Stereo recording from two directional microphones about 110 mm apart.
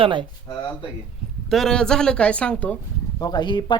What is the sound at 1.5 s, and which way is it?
Speech, 5° left (ahead or behind).